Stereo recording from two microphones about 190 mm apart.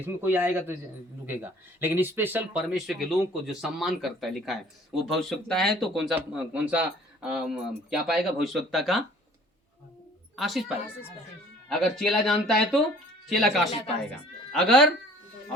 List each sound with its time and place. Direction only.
0.0 s a man's voice: 10° right (ahead or behind)
10.3 s a woman's voice: centre (ahead or behind)
11.7 s speech: centre (ahead or behind)